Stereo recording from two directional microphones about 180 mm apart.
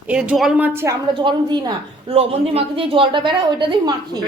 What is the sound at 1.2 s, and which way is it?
Speech, 25° right (ahead or behind).